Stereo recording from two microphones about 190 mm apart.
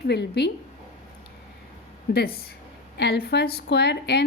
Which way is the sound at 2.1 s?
55° left (ahead or behind).